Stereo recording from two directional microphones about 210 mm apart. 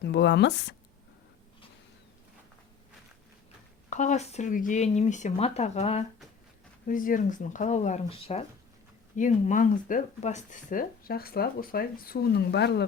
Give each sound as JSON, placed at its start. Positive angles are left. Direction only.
{"t": 0.0, "sound": "speech", "side_deg": 55}
{"t": 3.8, "sound": "speech", "side_deg": 35}
{"t": 6.8, "sound": "speech", "side_deg": 40}